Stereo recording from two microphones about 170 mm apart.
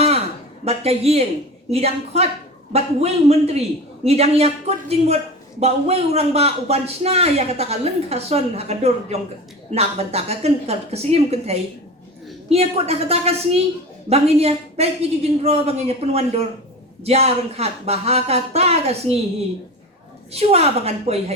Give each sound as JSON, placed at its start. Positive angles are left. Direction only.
{"t": 0.6, "sound": "a man's voice", "side_deg": -35}
{"t": 20.3, "sound": "a man's voice", "side_deg": -35}